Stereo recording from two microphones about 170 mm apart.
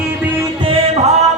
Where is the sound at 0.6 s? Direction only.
35° right (ahead or behind).